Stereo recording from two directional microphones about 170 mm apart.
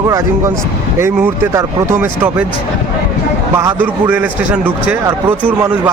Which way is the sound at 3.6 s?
10° right (ahead or behind).